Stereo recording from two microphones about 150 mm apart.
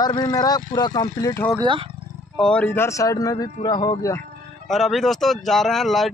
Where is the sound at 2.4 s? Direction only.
5° left (ahead or behind).